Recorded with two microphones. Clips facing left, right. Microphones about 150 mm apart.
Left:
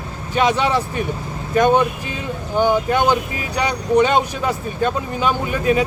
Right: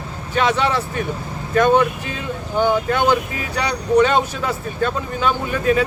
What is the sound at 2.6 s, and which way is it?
Speech, 15° left (ahead or behind).